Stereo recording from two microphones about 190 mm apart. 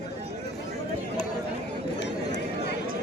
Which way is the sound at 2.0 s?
65° left (ahead or behind).